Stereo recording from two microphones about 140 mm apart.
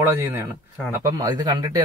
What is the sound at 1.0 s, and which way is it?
Speech, 25° right (ahead or behind).